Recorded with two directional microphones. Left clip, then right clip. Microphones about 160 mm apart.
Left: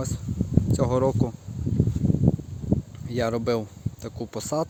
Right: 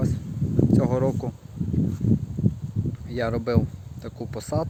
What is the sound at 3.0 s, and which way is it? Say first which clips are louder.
Speech: left 1 dB; 25° left (ahead or behind).